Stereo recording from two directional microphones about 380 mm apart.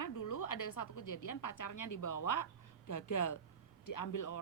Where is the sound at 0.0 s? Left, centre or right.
Left.